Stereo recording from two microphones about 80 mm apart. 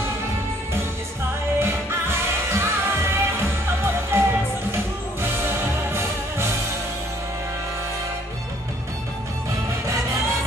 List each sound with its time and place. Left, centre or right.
1.6 s music: right